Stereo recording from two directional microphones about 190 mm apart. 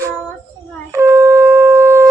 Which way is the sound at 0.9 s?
15° right (ahead or behind).